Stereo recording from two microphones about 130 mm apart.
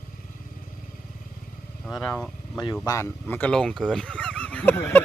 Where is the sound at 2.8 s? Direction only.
25° left (ahead or behind).